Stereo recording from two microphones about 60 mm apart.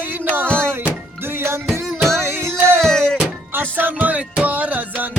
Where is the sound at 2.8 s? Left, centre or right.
Centre.